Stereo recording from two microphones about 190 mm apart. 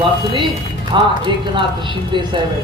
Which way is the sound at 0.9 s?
25° right (ahead or behind).